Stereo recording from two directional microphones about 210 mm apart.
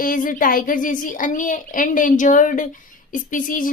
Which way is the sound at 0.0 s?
40° left (ahead or behind).